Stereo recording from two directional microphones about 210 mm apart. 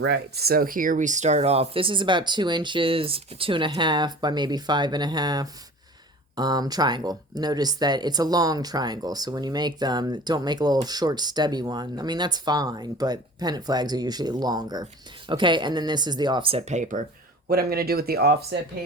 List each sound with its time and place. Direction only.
0.0 s speech: 50° right (ahead or behind)